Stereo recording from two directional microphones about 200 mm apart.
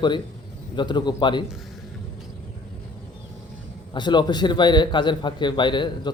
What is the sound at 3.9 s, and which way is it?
A man's voice, 20° left (ahead or behind).